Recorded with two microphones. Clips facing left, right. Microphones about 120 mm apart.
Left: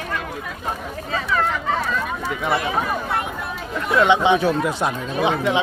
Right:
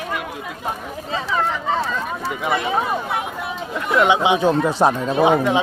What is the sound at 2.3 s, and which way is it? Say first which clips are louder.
Speech: right 1 dB; 5° right (ahead or behind).